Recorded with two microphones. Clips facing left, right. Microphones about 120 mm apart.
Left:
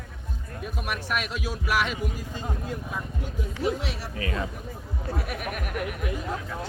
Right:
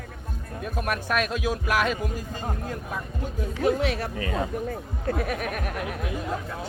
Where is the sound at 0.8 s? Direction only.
45° right (ahead or behind).